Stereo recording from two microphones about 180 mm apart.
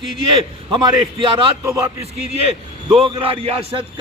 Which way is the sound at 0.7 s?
25° right (ahead or behind).